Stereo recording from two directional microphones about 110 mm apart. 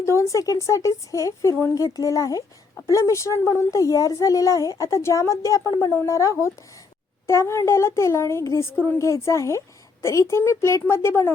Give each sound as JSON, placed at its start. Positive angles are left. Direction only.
{"t": 0.0, "sound": "a woman's voice", "side_deg": 25}